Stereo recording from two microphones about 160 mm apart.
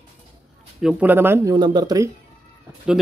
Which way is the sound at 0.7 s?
5° right (ahead or behind).